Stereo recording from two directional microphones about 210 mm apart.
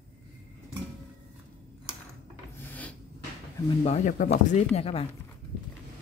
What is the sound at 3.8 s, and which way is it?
Speech, 35° left (ahead or behind).